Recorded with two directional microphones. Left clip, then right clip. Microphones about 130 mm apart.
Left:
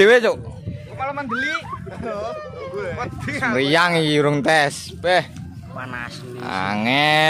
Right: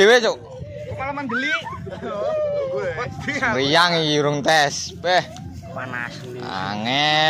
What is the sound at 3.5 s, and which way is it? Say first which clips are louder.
Speech: left 1 dB; 55° left (ahead or behind).